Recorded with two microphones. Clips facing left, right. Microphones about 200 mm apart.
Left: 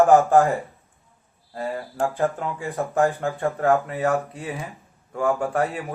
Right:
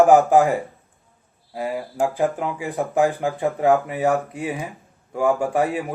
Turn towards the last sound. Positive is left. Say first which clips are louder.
# right 3 dB
turn(degrees=-15)  # may be behind; listen again after turning